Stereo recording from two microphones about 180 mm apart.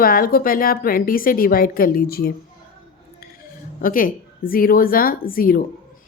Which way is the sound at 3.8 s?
50° left (ahead or behind).